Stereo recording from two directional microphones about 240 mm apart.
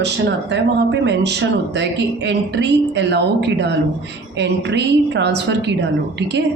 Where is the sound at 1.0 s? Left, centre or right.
Right.